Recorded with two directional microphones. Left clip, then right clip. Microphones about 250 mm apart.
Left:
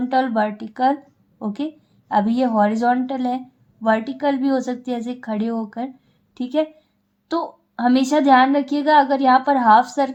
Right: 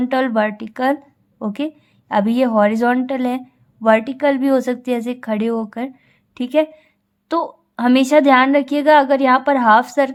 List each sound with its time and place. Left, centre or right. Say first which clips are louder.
0.0 s a woman's voice: right 2 dB; right